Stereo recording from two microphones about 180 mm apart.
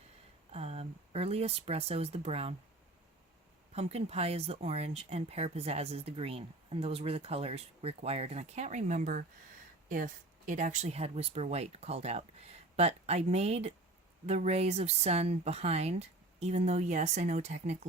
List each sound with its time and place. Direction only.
0.5 s speech: 35° right (ahead or behind)
3.7 s speech: 35° right (ahead or behind)